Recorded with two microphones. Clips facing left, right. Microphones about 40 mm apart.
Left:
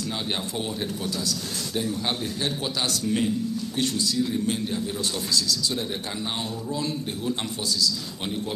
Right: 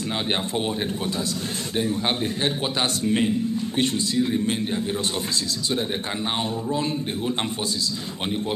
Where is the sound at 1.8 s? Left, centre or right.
Right.